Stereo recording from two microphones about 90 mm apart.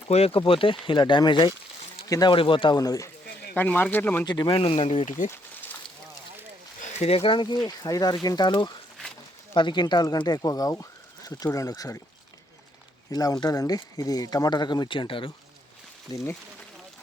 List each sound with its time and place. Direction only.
0.3 s speech: 80° left
0.9 s speech: 60° left (ahead or behind)
2.2 s speech: 75° left (ahead or behind)
2.7 s speech: 45° left (ahead or behind)
3.5 s speech: 20° left (ahead or behind)
4.3 s speech: 55° left (ahead or behind)
4.6 s speech: 90° left
7.1 s speech: 75° left (ahead or behind); by 12.0 s 35° left (ahead or behind)
13.1 s speech: 45° left (ahead or behind); by 15.3 s 75° left (ahead or behind)